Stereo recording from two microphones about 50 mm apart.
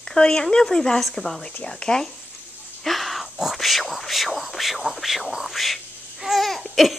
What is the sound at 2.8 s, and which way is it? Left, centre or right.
Wheeze, centre.